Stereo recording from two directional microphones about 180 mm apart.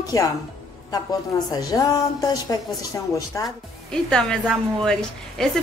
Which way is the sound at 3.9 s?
5° left (ahead or behind).